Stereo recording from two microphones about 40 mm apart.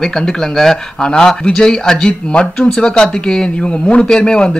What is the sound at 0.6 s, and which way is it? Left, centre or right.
A man's voice, centre.